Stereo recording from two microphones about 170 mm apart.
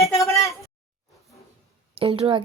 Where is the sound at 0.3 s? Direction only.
20° left (ahead or behind).